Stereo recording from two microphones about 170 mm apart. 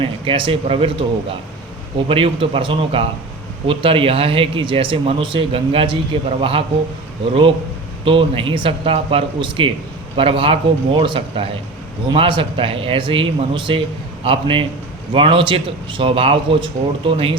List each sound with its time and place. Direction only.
0.0 s speech: 30° right (ahead or behind)
2.0 s speech: 30° right (ahead or behind)
8.0 s speech: 30° right (ahead or behind)